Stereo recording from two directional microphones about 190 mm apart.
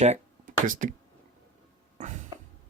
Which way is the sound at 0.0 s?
40° right (ahead or behind).